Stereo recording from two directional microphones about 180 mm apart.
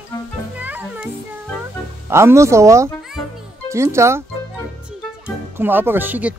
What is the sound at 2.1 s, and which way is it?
Speech, 15° right (ahead or behind).